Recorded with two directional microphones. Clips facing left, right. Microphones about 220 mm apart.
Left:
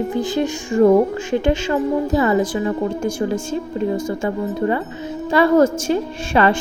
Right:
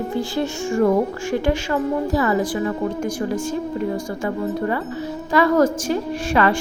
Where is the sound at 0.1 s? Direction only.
15° left (ahead or behind).